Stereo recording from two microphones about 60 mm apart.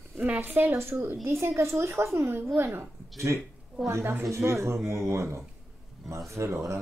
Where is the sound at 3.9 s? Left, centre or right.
Right.